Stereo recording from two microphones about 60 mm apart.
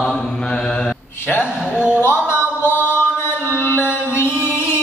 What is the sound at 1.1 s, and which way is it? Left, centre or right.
Speech, left.